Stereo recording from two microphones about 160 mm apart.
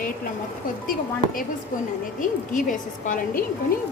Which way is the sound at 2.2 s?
55° left (ahead or behind).